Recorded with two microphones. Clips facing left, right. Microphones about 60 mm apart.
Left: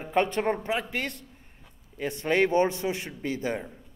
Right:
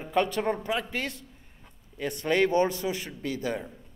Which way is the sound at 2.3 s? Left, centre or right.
Centre.